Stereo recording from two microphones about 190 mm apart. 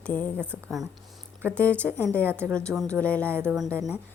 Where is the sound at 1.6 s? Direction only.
5° left (ahead or behind).